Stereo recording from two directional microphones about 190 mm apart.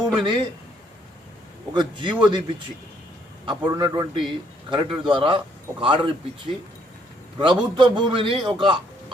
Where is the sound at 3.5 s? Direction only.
20° right (ahead or behind).